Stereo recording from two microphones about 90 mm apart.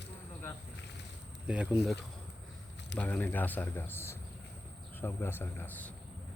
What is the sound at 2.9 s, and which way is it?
Speech, 15° left (ahead or behind).